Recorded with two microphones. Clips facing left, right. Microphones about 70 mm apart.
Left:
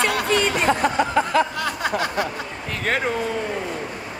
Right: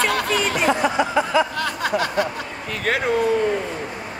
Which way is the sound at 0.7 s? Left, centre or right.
Left.